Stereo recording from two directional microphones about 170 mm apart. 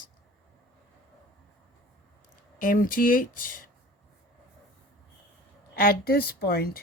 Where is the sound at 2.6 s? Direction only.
55° left (ahead or behind).